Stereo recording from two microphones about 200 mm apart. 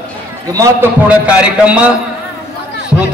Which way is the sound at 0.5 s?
15° right (ahead or behind).